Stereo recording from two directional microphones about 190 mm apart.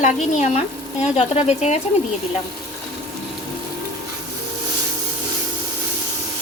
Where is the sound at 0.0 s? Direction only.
35° left (ahead or behind).